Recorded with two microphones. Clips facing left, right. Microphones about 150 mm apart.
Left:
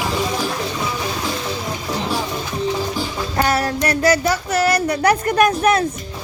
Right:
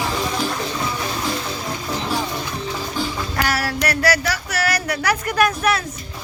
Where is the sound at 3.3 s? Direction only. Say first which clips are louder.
Left 5 dB; 25° left (ahead or behind).